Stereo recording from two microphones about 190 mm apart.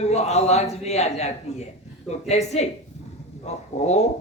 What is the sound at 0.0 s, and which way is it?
A man's voice, 35° left (ahead or behind).